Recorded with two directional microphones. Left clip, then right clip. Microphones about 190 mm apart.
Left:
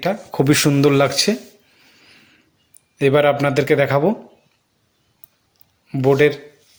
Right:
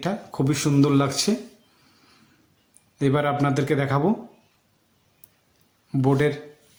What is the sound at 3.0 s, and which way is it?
A man's voice, 20° left (ahead or behind).